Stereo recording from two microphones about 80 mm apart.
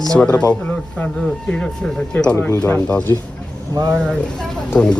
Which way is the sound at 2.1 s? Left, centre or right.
Centre.